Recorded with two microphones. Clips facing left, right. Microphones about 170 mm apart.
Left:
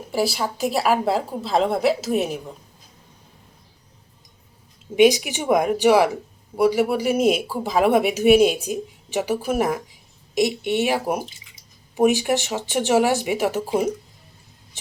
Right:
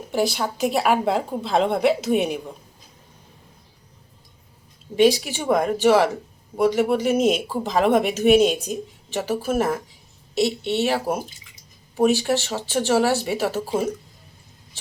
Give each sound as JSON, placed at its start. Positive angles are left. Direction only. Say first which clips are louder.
{"t": 0.1, "sound": "a woman's voice", "louder": "even", "side_deg": 5}
{"t": 4.9, "sound": "speech", "louder": "left 2 dB", "side_deg": 15}